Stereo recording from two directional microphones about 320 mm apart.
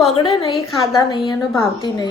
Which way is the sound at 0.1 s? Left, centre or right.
Centre.